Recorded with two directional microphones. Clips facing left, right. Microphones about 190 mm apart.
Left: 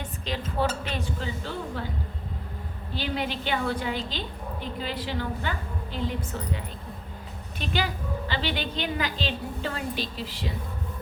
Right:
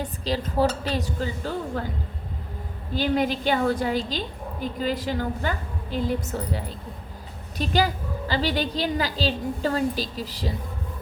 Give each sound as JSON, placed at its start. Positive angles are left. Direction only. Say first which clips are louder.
{"t": 0.0, "sound": "a woman's voice", "louder": "right 5 dB", "side_deg": -35}
{"t": 2.9, "sound": "a woman's voice", "louder": "right 7 dB", "side_deg": -45}
{"t": 7.6, "sound": "a woman's voice", "louder": "right 6 dB", "side_deg": -40}